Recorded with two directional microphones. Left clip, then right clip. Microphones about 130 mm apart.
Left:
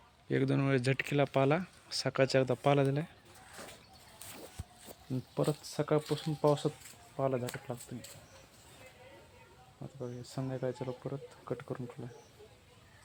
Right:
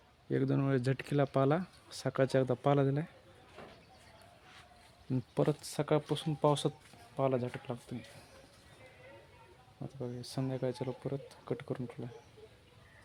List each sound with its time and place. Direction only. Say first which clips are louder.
0.3 s speech: left 1 dB; 10° right (ahead or behind)
1.0 s speech: right 1 dB; 30° right (ahead or behind); by 3.1 s 15° right (ahead or behind)
5.1 s speech: right 1 dB; 35° right (ahead or behind)
10.0 s speech: right 1 dB; 30° right (ahead or behind)